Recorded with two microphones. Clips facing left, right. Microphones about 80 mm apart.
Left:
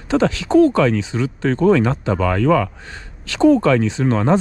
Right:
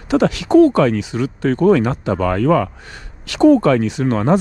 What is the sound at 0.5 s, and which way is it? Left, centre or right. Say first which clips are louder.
Speech: right 2 dB; right.